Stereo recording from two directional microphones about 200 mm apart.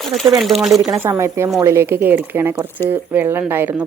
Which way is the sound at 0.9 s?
15° right (ahead or behind).